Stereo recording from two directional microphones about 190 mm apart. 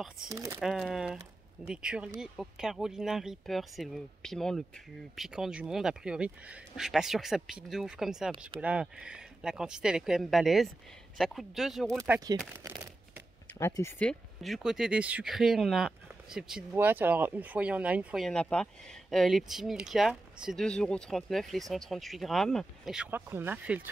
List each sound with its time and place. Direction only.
0.3 s speech: 15° right (ahead or behind)
0.6 s speech: centre (ahead or behind)
12.0 s speech: 15° right (ahead or behind)
12.6 s a sound: 15° right (ahead or behind)
13.6 s speech: 15° left (ahead or behind); by 23.9 s 10° right (ahead or behind)